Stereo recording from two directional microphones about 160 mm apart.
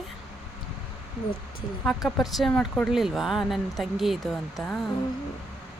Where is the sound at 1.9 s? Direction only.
Centre (ahead or behind).